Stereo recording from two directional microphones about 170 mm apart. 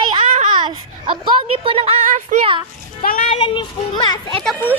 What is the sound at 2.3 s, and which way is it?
Speech, 50° right (ahead or behind).